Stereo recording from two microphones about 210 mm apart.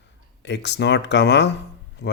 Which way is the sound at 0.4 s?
55° left (ahead or behind).